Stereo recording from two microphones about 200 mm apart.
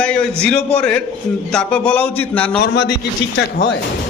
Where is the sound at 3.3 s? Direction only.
60° left (ahead or behind).